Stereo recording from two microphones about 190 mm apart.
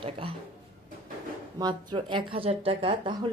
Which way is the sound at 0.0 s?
30° right (ahead or behind).